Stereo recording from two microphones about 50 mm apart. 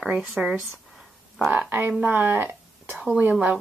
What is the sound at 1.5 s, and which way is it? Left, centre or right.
Speech, right.